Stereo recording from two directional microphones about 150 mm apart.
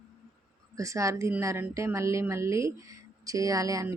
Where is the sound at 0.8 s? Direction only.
20° right (ahead or behind).